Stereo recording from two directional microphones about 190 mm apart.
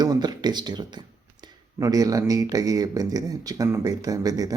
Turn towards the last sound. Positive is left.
turn(degrees=-20)  # may be behind; listen again after turning